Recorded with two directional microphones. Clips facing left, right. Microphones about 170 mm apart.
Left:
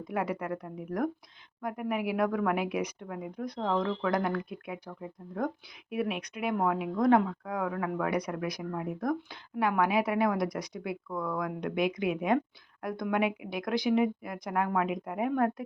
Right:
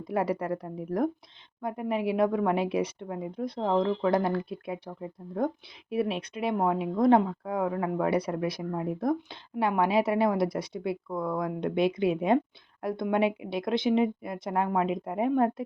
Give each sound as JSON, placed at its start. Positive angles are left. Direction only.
{"t": 0.0, "sound": "speech", "side_deg": -35}